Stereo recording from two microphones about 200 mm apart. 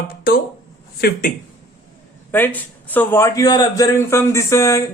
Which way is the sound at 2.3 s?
10° left (ahead or behind).